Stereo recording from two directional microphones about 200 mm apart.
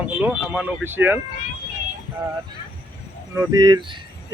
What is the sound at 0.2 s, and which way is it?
Speech, 5° right (ahead or behind).